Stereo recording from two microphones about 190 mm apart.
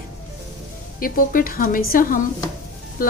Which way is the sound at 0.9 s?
50° left (ahead or behind).